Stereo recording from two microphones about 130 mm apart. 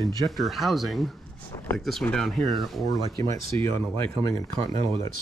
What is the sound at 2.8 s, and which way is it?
Speech, 30° left (ahead or behind).